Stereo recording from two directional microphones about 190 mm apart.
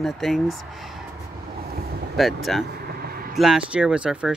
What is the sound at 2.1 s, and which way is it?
Speech, centre (ahead or behind).